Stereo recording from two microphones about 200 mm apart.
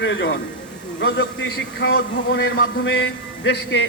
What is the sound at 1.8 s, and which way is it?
A man's voice, 70° left (ahead or behind).